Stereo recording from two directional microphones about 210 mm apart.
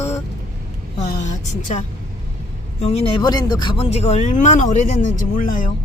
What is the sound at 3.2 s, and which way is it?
Speech, 20° left (ahead or behind).